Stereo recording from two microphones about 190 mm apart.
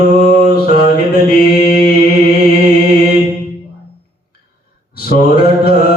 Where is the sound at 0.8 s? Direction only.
55° left (ahead or behind).